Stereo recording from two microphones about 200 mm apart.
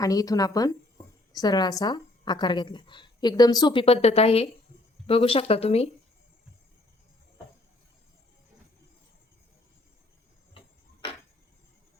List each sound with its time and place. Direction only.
0.0 s a woman's voice: 20° left (ahead or behind)